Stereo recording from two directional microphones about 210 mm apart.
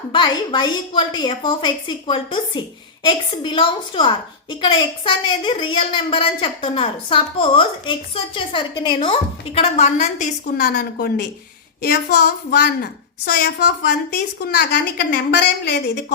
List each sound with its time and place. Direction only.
0.1 s a woman's voice: 20° left (ahead or behind); by 16.1 s 55° left (ahead or behind)